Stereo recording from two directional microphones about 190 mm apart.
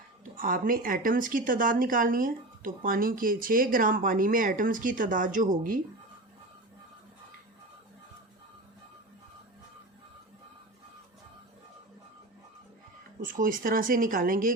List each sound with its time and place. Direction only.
0.3 s a woman's voice: 50° right (ahead or behind)
13.2 s a woman's voice: 45° right (ahead or behind)